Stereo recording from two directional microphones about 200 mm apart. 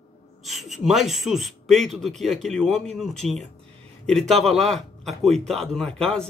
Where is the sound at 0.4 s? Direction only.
Centre (ahead or behind).